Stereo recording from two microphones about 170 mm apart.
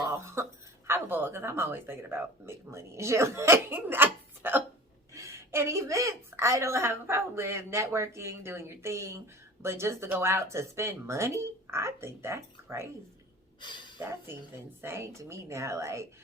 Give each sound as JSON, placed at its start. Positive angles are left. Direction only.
{"t": 0.0, "sound": "a sound", "side_deg": -15}
{"t": 0.9, "sound": "a woman's voice", "side_deg": -10}
{"t": 14.0, "sound": "a woman's voice", "side_deg": -15}